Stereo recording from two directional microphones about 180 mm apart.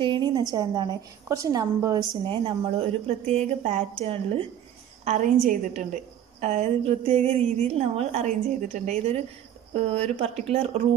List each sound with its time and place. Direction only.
0.0 s a woman's voice: 25° right (ahead or behind)